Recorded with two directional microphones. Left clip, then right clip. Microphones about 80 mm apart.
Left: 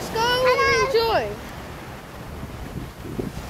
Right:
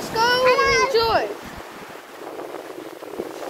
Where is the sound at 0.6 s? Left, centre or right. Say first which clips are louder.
Right 1 dB; right.